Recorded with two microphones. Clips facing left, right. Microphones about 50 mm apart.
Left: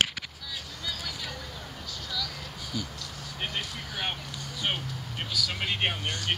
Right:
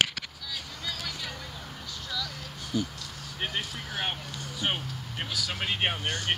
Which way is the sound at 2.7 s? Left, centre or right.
Left.